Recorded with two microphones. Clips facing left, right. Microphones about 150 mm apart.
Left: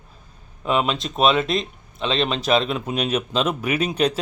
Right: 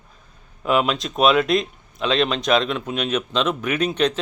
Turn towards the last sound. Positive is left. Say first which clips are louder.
# even
turn(degrees=10)  # may be behind; listen again after turning